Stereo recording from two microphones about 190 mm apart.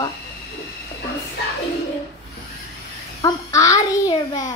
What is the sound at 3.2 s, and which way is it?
A child's voice, 15° left (ahead or behind).